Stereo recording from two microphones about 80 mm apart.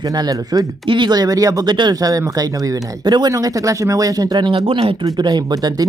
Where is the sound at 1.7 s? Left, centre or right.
Right.